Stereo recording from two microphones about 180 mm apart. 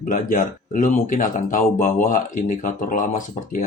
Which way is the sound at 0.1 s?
45° left (ahead or behind).